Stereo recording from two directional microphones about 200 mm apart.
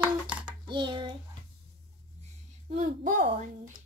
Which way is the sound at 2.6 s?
35° right (ahead or behind).